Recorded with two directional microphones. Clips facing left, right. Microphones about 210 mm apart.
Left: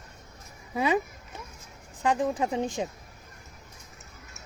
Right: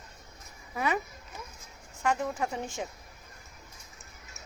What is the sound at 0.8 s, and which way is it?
Speech, 20° left (ahead or behind).